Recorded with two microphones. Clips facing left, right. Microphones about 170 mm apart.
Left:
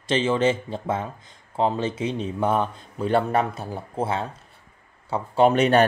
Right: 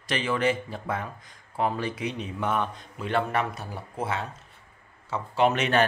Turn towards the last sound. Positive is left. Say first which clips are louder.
# left 5 dB
turn(degrees=35)  # may be behind; listen again after turning